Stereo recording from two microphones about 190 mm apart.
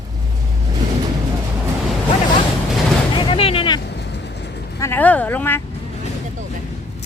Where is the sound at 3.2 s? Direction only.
30° left (ahead or behind).